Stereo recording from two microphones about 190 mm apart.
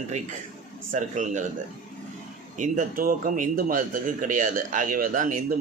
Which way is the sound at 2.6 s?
45° right (ahead or behind).